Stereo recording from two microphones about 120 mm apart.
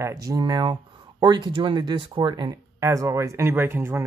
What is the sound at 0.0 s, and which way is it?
Speech, 30° right (ahead or behind).